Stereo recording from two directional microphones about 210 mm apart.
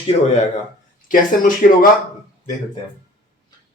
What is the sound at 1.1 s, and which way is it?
Speech, 40° left (ahead or behind).